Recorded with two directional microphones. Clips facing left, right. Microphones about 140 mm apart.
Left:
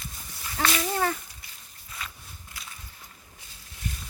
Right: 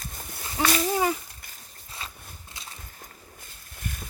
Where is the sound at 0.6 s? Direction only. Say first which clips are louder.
Right 2 dB; 20° right (ahead or behind).